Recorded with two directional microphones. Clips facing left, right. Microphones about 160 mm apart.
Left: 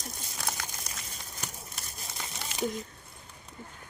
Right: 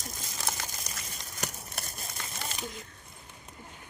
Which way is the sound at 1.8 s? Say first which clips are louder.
Right 8 dB; 65° right (ahead or behind).